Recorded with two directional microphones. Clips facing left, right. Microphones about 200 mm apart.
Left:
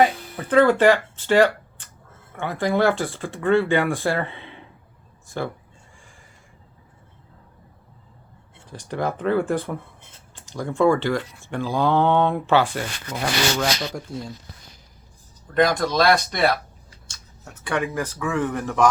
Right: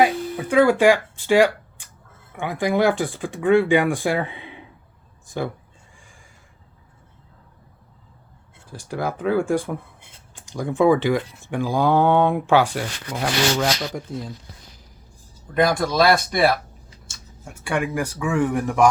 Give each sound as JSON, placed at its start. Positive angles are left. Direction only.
{"t": 0.0, "sound": "a sound", "side_deg": -10}
{"t": 2.3, "sound": "speech", "side_deg": -15}
{"t": 8.7, "sound": "speech", "side_deg": -5}
{"t": 13.2, "sound": "rub", "side_deg": 0}
{"t": 15.5, "sound": "speech", "side_deg": -5}